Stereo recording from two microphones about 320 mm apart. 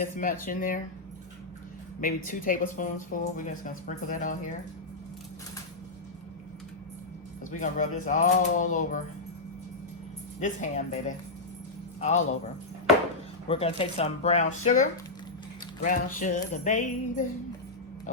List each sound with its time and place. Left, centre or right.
0.2 s speech: left
2.0 s speech: left
7.5 s speech: left
10.4 s speech: left
13.5 s speech: centre